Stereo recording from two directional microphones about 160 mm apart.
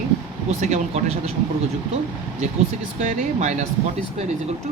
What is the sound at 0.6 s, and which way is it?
Speech, 45° right (ahead or behind).